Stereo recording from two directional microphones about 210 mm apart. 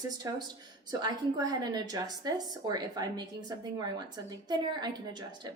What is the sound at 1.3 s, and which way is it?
A woman's voice, 20° right (ahead or behind).